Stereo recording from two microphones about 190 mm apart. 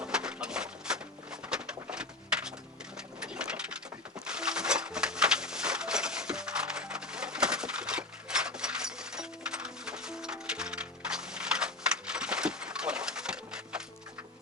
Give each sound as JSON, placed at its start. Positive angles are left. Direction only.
{"t": 0.0, "sound": "pigeon", "side_deg": -5}
{"t": 3.2, "sound": "sewing machine", "side_deg": -5}
{"t": 4.3, "sound": "a sound", "side_deg": -5}